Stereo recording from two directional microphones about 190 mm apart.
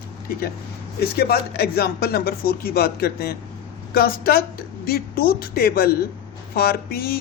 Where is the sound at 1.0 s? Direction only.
55° left (ahead or behind).